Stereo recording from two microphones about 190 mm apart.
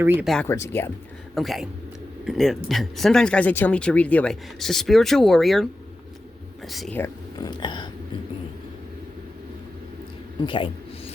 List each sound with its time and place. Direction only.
0.0 s speech: 10° right (ahead or behind)
0.3 s speech: 5° left (ahead or behind)
1.4 s speech: centre (ahead or behind)
6.7 s speech: centre (ahead or behind)
6.9 s speech: 10° left (ahead or behind)
7.5 s a sound: 25° left (ahead or behind)
10.4 s a sound: 25° left (ahead or behind)